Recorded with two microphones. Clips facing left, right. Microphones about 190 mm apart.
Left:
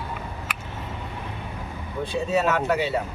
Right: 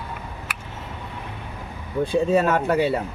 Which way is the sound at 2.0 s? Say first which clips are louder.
Right 4 dB; 55° right (ahead or behind).